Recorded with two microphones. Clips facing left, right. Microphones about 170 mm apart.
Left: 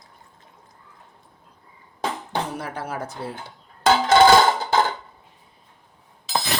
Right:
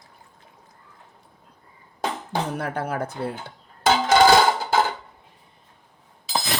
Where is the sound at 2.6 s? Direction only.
60° right (ahead or behind).